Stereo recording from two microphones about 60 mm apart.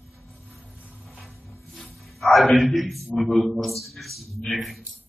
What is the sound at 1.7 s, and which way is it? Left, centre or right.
Wild animals, centre.